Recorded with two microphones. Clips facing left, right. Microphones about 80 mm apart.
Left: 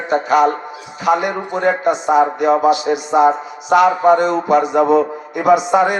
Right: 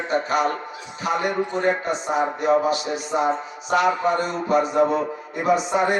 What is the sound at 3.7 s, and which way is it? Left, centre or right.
Speech, left.